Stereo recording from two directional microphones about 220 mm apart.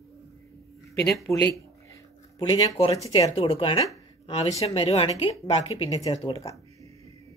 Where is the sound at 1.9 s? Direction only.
20° left (ahead or behind).